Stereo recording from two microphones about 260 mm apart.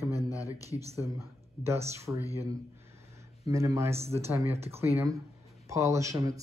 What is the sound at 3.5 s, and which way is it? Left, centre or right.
Speech, centre.